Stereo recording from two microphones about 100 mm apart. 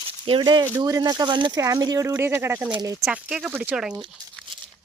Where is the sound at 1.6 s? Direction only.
35° right (ahead or behind).